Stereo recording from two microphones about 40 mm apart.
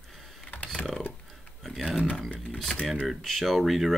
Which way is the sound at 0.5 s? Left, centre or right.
Left.